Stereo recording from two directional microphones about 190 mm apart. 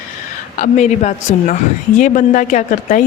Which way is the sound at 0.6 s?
40° left (ahead or behind).